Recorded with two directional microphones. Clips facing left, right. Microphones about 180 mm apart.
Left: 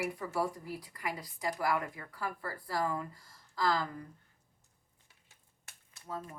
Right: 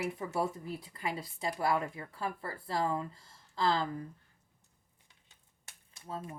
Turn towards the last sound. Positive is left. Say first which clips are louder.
# right 1 dB
turn(degrees=-25)  # may be behind; listen again after turning